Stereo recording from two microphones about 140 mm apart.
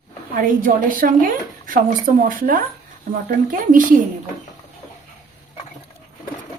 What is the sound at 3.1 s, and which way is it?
Speech, 75° right (ahead or behind).